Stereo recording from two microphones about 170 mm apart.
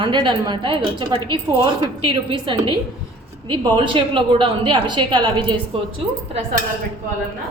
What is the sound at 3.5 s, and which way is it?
A woman's voice, 25° right (ahead or behind).